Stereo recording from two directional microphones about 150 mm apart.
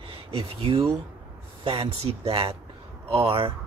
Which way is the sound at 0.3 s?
40° right (ahead or behind).